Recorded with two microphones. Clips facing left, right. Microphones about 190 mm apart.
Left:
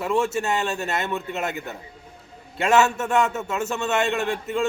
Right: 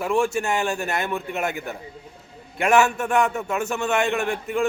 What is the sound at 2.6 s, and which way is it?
A man's voice, 25° left (ahead or behind).